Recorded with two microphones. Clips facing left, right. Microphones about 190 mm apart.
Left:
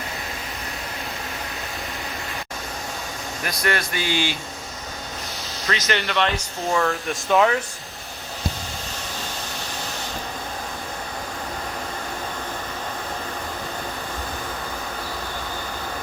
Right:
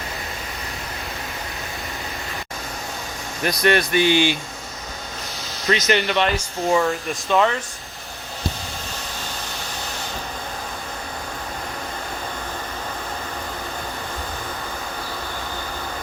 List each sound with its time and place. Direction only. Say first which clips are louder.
3.4 s speech: right 7 dB; 20° right (ahead or behind)
5.6 s speech: right 5 dB; 20° right (ahead or behind)
7.1 s speech: left 3 dB; 5° left (ahead or behind)